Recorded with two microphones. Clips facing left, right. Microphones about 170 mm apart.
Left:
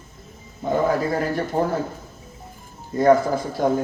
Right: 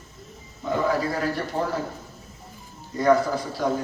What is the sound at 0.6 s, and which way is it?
A man's voice, 50° left (ahead or behind).